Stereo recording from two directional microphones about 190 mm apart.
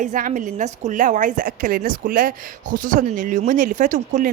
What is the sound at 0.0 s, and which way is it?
A woman's voice, 45° right (ahead or behind).